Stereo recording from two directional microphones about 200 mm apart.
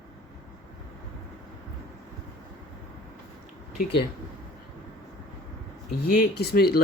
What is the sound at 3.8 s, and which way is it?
Speech, 55° left (ahead or behind).